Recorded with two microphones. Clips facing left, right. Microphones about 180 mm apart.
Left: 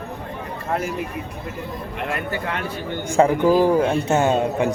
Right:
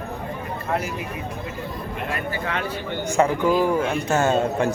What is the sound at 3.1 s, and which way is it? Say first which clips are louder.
A man's voice: left 4 dB; 30° left (ahead or behind).